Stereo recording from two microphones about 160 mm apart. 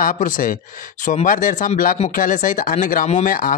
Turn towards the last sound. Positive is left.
turn(degrees=55)  # may be behind; listen again after turning